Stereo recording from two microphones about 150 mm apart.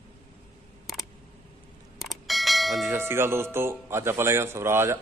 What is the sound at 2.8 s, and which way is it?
Speech, 15° right (ahead or behind).